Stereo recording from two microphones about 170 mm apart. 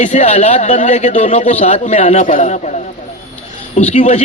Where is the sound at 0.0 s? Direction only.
45° left (ahead or behind).